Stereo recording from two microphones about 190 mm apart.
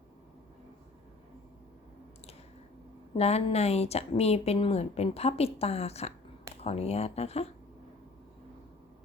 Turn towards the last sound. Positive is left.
turn(degrees=35)  # may be behind; listen again after turning